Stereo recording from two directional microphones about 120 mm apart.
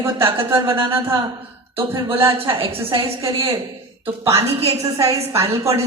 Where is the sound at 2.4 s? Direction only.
50° right (ahead or behind).